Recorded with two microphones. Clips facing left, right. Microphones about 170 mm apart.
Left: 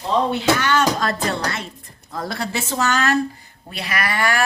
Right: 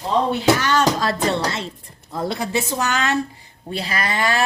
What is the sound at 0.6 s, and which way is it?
Speech, 35° right (ahead or behind).